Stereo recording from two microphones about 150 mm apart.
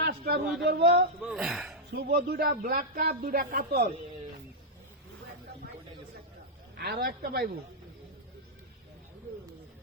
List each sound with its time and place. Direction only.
0.0 s a sound: 90° right
0.6 s a man's voice: 90° right
1.2 s speech: 5° right (ahead or behind)
1.9 s a man's voice: 90° right
6.7 s a man's voice: 90° right